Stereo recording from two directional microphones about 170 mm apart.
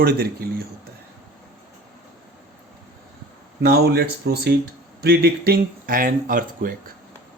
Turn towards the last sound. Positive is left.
turn(degrees=-55)  # may be behind; listen again after turning